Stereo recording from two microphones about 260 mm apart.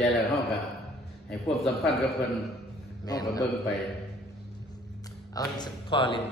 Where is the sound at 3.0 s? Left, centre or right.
Centre.